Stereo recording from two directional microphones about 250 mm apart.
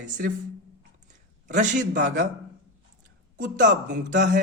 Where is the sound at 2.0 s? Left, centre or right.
Right.